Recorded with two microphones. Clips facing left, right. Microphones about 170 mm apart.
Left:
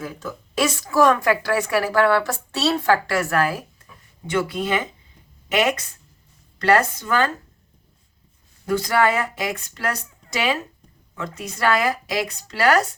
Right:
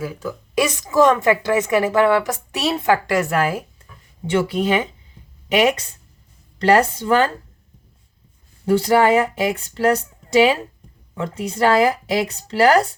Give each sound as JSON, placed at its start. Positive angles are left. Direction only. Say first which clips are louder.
{"t": 0.0, "sound": "a woman's voice", "louder": "right 4 dB", "side_deg": -10}
{"t": 6.6, "sound": "a woman's voice", "louder": "right 3 dB", "side_deg": -30}
{"t": 8.6, "sound": "a woman's voice", "louder": "right 5 dB", "side_deg": -30}